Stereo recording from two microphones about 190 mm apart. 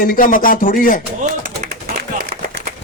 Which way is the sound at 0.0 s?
45° left (ahead or behind).